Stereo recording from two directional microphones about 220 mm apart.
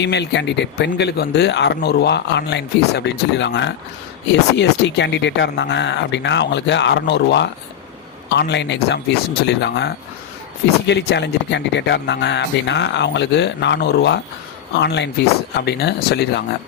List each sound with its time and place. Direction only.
0.0 s speech: 50° left (ahead or behind)